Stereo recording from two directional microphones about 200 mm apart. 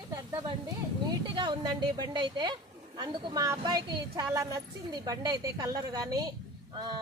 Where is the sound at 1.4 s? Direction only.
20° right (ahead or behind).